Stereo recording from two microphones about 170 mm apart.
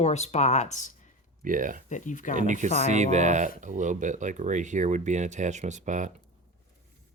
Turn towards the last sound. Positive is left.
turn(degrees=-45)  # may be behind; listen again after turning